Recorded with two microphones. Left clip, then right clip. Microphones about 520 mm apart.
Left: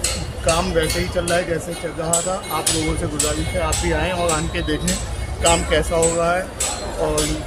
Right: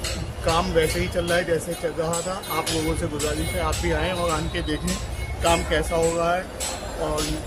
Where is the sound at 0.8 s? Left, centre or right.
Right.